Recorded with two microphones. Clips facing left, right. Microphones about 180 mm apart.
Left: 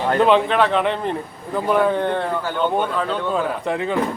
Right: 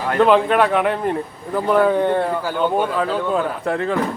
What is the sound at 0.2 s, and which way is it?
Speech, centre (ahead or behind).